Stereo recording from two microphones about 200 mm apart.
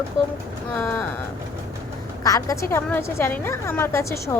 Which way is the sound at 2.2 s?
15° left (ahead or behind).